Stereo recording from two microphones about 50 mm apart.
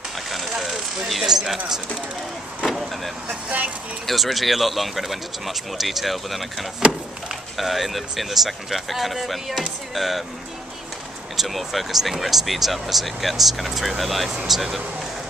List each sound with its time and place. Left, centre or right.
0.3 s mechanisms: centre
1.2 s speech: centre
2.6 s vehicle: centre
3.4 s speech: right
4.0 s speech: centre
7.5 s speech: centre
11.3 s speech: centre